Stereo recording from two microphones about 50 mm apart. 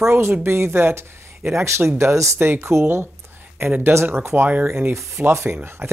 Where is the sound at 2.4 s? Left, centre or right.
Right.